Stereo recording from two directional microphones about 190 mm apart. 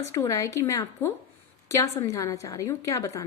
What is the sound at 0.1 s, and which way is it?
A woman's voice, 15° left (ahead or behind).